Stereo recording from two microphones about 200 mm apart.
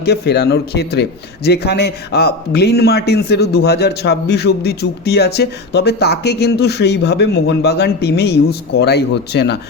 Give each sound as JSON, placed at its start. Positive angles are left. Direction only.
{"t": 0.0, "sound": "a man's voice", "side_deg": 55}